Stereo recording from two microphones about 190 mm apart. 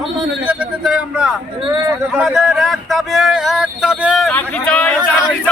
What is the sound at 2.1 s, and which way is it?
Crowd, centre (ahead or behind).